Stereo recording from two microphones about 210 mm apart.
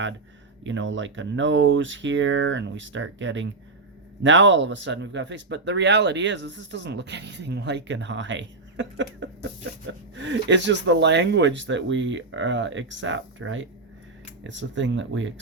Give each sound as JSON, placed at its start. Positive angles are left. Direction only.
{"t": 0.6, "sound": "speech", "side_deg": -60}